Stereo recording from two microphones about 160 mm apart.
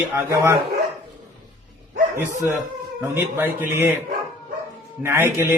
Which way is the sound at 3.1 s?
15° right (ahead or behind).